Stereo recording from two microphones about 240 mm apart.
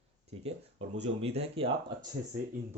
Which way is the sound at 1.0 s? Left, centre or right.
Right.